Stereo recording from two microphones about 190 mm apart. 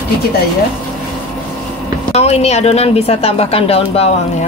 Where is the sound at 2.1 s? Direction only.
35° left (ahead or behind).